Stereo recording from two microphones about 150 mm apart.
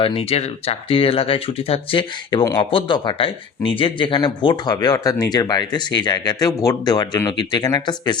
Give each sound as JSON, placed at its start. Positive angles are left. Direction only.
{"t": 0.0, "sound": "speech", "side_deg": 40}